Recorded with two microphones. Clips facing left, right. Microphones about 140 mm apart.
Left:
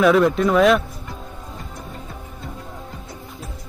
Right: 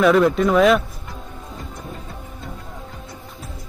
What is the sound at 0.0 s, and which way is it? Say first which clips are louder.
Speech: even; centre (ahead or behind).